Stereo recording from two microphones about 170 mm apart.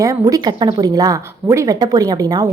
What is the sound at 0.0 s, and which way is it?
Speech, 20° right (ahead or behind).